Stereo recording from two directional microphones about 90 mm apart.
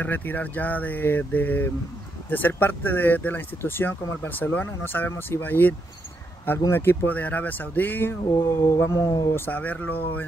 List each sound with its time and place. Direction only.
0.0 s speech: 20° left (ahead or behind)
8.3 s a sound: 30° left (ahead or behind)
9.3 s speech: 20° left (ahead or behind)